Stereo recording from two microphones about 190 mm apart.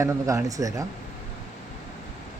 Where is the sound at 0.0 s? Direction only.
15° right (ahead or behind).